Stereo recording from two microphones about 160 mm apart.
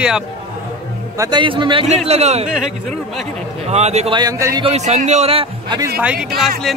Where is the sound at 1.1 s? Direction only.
30° right (ahead or behind).